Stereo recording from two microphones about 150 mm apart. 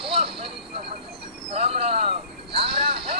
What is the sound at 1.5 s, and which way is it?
Vehicle, 45° right (ahead or behind).